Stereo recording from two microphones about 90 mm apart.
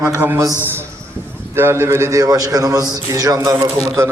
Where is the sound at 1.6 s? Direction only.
25° right (ahead or behind).